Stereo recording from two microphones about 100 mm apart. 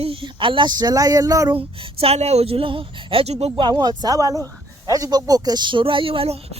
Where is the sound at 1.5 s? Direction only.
70° right (ahead or behind).